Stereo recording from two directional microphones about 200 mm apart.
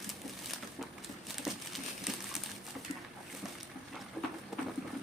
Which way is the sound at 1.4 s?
Centre (ahead or behind).